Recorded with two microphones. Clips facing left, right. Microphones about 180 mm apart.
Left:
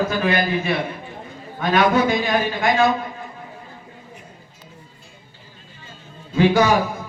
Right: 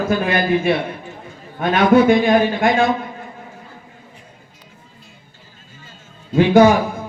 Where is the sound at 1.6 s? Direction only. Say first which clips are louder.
Right 5 dB; 55° right (ahead or behind).